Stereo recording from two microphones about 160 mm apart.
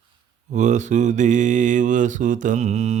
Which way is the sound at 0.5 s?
50° right (ahead or behind).